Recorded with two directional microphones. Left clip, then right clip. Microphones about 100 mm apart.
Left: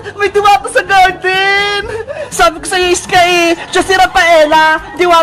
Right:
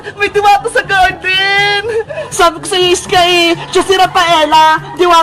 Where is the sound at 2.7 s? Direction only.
35° left (ahead or behind).